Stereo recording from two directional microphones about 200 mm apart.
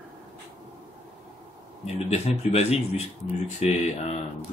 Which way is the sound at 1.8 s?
30° left (ahead or behind).